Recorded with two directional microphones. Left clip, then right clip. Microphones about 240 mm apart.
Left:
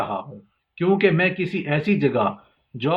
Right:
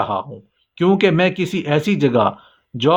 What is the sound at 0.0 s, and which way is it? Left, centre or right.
Speech, right.